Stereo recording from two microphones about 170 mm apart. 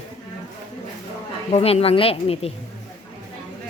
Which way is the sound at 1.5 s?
35° left (ahead or behind).